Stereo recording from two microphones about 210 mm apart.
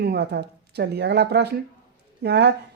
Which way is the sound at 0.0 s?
50° right (ahead or behind).